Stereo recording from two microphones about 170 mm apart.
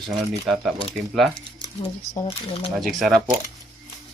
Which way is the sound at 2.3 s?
35° left (ahead or behind).